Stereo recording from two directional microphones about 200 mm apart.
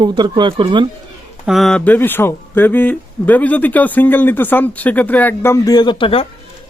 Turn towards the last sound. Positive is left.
turn(degrees=25)  # may be behind; listen again after turning